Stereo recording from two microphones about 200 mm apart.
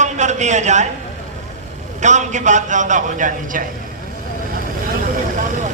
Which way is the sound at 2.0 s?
35° right (ahead or behind).